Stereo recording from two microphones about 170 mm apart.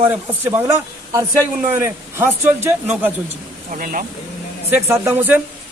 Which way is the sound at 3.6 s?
55° right (ahead or behind).